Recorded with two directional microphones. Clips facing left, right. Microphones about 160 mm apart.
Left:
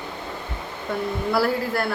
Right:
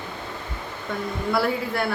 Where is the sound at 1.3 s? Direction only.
Centre (ahead or behind).